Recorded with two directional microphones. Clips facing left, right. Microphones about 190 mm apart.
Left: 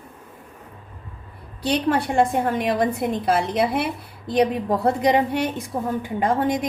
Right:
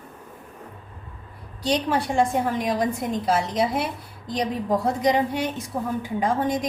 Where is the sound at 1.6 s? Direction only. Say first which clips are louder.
Left 2 dB; 60° left (ahead or behind).